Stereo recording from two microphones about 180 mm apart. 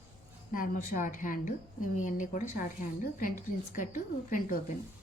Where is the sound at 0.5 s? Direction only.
50° left (ahead or behind).